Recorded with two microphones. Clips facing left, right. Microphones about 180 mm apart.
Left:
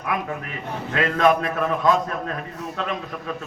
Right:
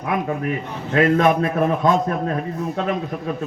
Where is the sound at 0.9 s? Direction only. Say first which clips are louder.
Right 4 dB; 25° right (ahead or behind).